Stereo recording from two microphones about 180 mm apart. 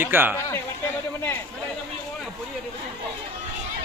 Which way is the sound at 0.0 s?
10° right (ahead or behind).